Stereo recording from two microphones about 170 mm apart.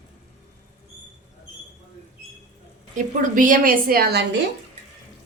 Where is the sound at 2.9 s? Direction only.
50° right (ahead or behind).